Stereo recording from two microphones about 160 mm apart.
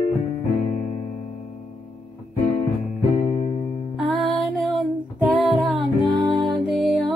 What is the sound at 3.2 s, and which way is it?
Music, 45° left (ahead or behind).